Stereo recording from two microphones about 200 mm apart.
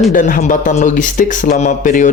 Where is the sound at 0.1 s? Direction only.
40° left (ahead or behind).